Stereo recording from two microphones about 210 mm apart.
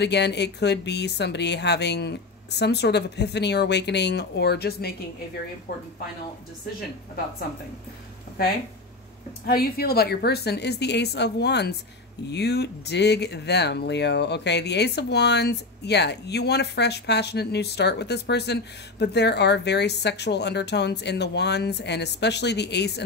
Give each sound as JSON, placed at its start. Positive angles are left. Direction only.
{"t": 0.0, "sound": "speech", "side_deg": 55}
{"t": 9.5, "sound": "speech", "side_deg": 45}